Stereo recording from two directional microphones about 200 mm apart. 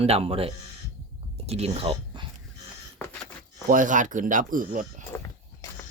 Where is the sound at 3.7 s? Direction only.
40° right (ahead or behind).